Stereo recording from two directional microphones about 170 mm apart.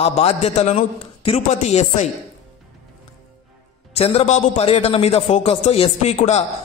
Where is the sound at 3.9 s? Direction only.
35° left (ahead or behind).